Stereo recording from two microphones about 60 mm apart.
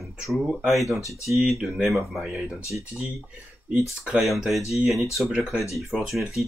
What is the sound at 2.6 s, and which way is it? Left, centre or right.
Speech, left.